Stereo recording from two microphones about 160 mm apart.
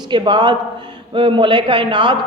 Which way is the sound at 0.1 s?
30° right (ahead or behind).